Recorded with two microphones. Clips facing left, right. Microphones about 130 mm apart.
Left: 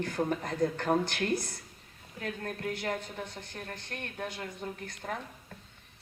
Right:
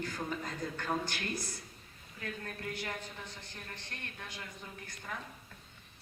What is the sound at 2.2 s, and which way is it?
Speech, 55° left (ahead or behind).